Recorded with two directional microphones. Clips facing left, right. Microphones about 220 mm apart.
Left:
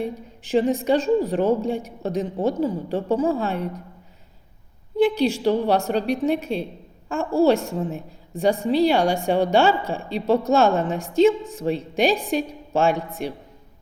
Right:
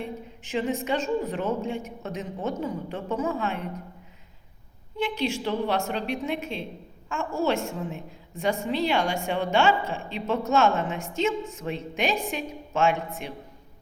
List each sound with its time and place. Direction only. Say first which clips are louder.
0.0 s a woman's voice: left 6 dB; 35° left (ahead or behind)
4.9 s a woman's voice: left 9 dB; 35° left (ahead or behind)